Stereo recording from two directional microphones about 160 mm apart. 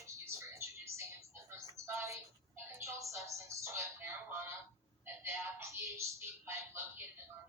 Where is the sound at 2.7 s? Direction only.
20° right (ahead or behind).